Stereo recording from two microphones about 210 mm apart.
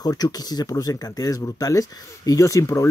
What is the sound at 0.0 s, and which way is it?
Speech, 20° left (ahead or behind).